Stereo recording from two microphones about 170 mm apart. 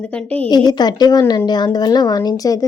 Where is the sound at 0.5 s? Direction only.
25° left (ahead or behind).